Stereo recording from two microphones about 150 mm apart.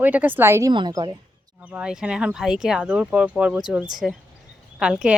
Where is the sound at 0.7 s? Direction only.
30° right (ahead or behind).